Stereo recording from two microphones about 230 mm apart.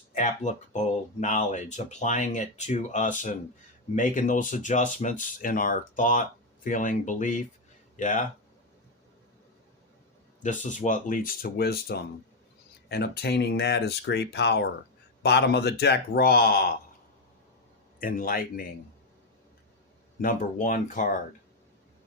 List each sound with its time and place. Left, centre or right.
0.1 s speech: left
10.4 s speech: left
18.0 s speech: left
20.2 s speech: left